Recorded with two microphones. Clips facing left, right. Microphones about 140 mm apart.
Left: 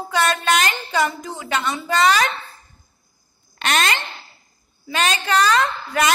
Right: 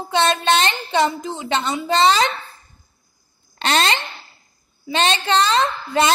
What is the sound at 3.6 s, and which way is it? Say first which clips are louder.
A woman's voice: right 2 dB; 30° right (ahead or behind).